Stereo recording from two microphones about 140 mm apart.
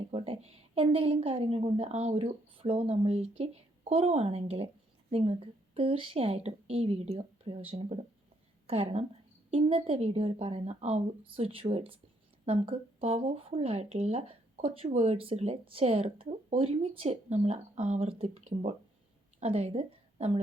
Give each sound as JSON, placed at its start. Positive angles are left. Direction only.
{"t": 0.1, "sound": "a woman's voice", "side_deg": -40}